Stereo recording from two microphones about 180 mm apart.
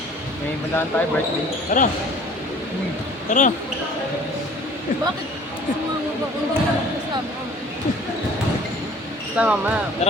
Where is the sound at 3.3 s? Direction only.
45° left (ahead or behind).